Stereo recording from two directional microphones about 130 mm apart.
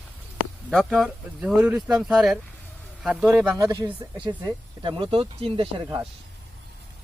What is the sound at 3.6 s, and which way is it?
Speech, 30° right (ahead or behind).